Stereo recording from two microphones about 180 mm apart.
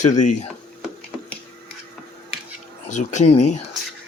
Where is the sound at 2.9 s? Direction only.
40° left (ahead or behind).